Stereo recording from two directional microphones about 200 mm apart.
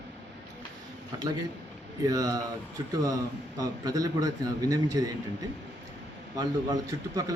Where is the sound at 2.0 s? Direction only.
20° right (ahead or behind).